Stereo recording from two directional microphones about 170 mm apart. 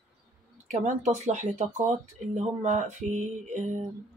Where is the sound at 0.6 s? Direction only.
45° right (ahead or behind).